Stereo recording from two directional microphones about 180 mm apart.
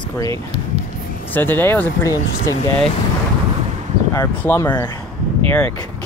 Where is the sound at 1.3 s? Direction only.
10° left (ahead or behind).